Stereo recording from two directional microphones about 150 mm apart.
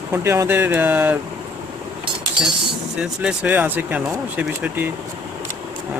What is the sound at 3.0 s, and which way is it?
Speech, 5° right (ahead or behind).